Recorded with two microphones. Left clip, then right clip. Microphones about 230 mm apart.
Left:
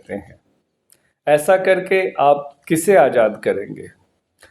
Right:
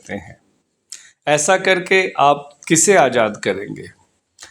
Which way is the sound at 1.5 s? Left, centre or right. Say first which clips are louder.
Even; right.